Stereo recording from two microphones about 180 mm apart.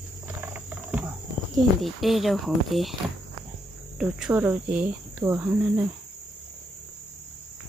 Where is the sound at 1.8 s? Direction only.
Centre (ahead or behind).